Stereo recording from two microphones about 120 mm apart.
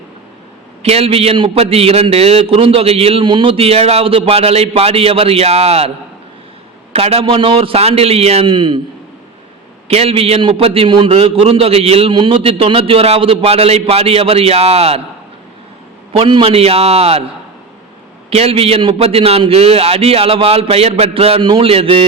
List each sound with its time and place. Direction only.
0.8 s a man's voice: 55° right (ahead or behind)
6.9 s a man's voice: 55° right (ahead or behind)
9.9 s a man's voice: 55° right (ahead or behind)
16.1 s a man's voice: 45° right (ahead or behind)
18.3 s a man's voice: 55° right (ahead or behind)